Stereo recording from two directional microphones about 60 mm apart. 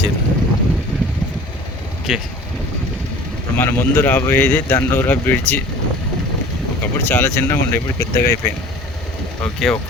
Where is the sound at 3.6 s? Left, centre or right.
Left.